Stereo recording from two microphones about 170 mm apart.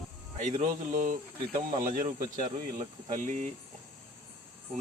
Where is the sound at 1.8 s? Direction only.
50° right (ahead or behind).